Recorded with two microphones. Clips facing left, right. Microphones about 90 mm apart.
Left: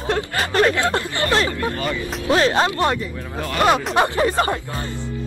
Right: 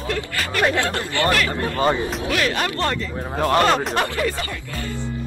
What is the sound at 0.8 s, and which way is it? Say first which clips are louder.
Speech: left 1 dB; 20° left (ahead or behind).